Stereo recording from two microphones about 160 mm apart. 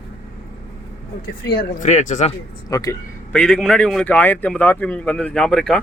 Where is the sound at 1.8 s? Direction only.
50° left (ahead or behind).